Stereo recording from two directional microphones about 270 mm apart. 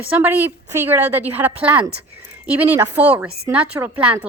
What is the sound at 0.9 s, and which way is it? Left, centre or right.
A woman's voice, centre.